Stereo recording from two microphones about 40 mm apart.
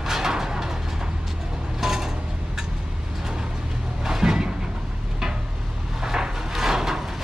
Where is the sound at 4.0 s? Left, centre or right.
Centre.